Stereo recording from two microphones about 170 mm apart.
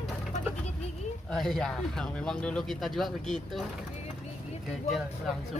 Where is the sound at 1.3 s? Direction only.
Centre (ahead or behind).